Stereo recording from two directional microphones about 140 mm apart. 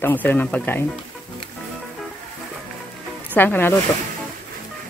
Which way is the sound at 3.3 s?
15° left (ahead or behind).